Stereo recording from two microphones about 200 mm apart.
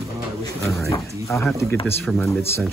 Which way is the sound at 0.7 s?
15° left (ahead or behind).